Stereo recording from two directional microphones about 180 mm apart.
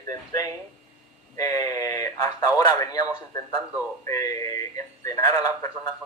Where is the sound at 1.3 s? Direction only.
20° left (ahead or behind).